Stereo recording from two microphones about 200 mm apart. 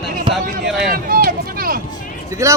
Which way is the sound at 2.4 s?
15° right (ahead or behind).